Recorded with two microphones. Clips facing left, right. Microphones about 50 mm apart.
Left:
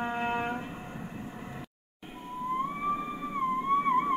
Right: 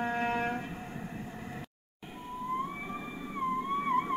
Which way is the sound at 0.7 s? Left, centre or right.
Centre.